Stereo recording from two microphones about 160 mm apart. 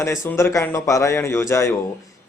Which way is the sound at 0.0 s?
15° left (ahead or behind).